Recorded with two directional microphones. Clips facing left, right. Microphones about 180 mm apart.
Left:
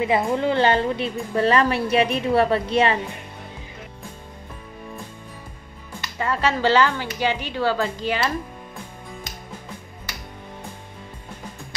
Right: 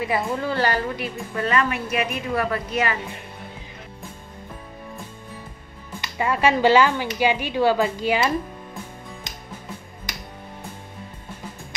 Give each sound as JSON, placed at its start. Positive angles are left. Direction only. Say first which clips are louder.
{"t": 0.0, "sound": "a woman's voice", "louder": "left 4 dB", "side_deg": 20}
{"t": 5.9, "sound": "speech", "louder": "right 2 dB", "side_deg": -15}